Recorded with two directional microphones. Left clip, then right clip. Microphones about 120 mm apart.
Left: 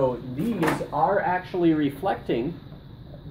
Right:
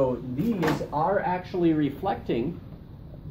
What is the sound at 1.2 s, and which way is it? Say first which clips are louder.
Speech: left 2 dB; 15° left (ahead or behind).